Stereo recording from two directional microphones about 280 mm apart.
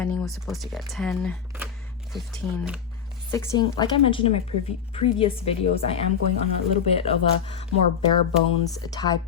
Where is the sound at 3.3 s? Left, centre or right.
Centre.